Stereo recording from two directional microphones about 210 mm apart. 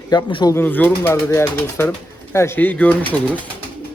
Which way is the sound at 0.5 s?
10° left (ahead or behind).